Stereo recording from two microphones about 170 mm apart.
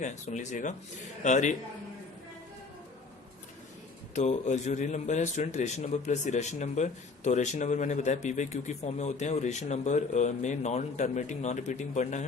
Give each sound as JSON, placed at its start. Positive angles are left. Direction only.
{"t": 0.0, "sound": "speech", "side_deg": 45}
{"t": 4.1, "sound": "speech", "side_deg": 45}